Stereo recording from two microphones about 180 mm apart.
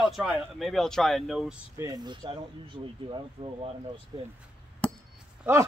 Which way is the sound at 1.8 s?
20° right (ahead or behind).